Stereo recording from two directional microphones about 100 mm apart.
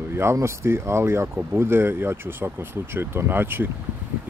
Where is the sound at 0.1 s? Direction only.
25° right (ahead or behind).